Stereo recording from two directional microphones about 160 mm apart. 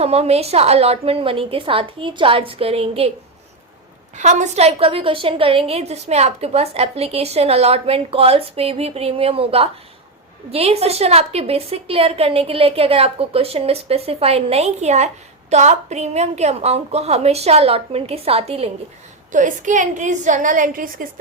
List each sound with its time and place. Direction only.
0.0 s a woman's voice: 40° right (ahead or behind)
4.2 s a woman's voice: 45° right (ahead or behind)
19.3 s a woman's voice: 50° right (ahead or behind)